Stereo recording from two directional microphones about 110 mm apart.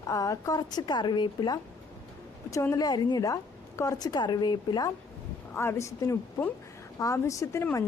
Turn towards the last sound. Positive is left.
turn(degrees=25)  # may be behind; listen again after turning